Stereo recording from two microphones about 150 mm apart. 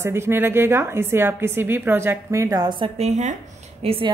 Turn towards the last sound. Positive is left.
turn(degrees=-40)  # may be behind; listen again after turning